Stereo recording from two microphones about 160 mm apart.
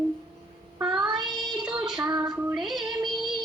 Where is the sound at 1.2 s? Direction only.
Centre (ahead or behind).